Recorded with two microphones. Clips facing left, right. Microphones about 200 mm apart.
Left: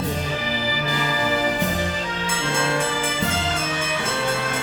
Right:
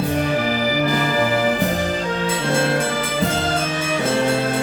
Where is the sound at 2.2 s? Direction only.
40° right (ahead or behind).